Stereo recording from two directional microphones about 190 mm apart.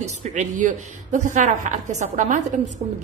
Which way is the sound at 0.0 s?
40° right (ahead or behind).